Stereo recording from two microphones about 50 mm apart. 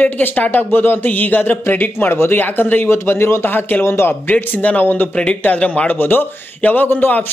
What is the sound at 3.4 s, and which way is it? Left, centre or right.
Speech, left.